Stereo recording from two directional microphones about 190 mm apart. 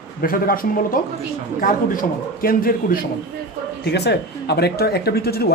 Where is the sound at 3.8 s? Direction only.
60° left (ahead or behind).